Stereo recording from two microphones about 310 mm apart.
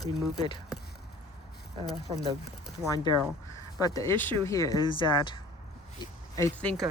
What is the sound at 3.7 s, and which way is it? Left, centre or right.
Speech, centre.